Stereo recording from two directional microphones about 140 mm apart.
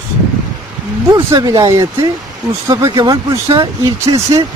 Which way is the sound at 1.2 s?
25° right (ahead or behind).